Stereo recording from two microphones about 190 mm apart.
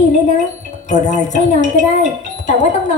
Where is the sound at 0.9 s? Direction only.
40° left (ahead or behind).